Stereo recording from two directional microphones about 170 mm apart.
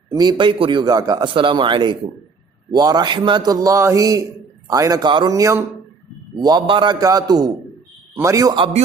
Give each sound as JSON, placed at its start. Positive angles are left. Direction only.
{"t": 0.1, "sound": "a man's voice", "side_deg": -25}